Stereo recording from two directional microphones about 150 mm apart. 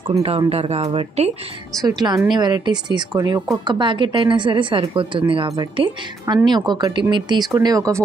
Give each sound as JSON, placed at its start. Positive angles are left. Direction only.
{"t": 0.0, "sound": "a woman's voice", "side_deg": -40}
{"t": 1.8, "sound": "a woman's voice", "side_deg": -25}